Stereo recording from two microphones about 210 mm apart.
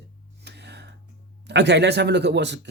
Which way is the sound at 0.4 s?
55° right (ahead or behind).